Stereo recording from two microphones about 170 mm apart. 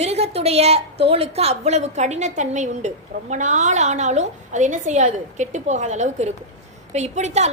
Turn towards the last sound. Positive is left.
turn(degrees=-40)  # may be behind; listen again after turning